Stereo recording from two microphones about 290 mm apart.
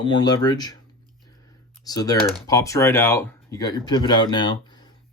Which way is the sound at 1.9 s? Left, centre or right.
Centre.